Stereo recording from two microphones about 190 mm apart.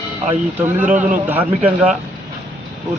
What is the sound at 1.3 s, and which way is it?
Speech, 10° right (ahead or behind).